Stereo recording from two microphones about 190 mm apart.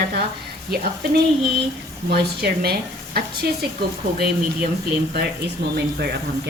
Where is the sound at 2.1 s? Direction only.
55° right (ahead or behind).